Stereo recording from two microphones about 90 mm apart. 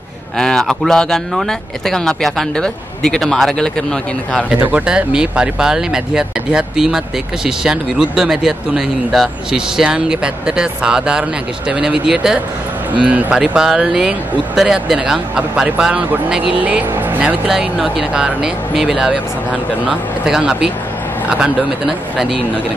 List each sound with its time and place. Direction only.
0.4 s speech: 5° left (ahead or behind)
4.6 s speech: 10° right (ahead or behind)